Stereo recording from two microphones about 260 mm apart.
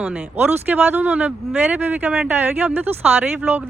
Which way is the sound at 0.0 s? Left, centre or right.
Centre.